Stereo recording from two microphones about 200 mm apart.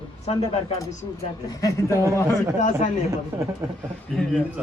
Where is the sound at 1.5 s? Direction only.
15° left (ahead or behind).